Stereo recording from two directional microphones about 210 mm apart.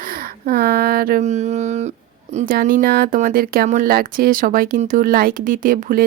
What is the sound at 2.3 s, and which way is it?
Speech, 45° right (ahead or behind).